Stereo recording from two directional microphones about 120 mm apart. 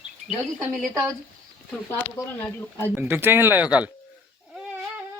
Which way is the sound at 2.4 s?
15° left (ahead or behind).